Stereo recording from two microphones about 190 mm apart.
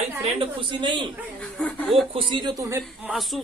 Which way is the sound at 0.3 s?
30° right (ahead or behind).